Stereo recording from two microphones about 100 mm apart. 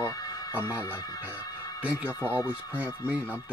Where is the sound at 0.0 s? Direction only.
35° left (ahead or behind).